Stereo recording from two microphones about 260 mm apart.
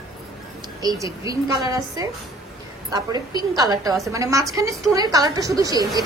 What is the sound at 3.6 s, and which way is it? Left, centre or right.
A woman's voice, centre.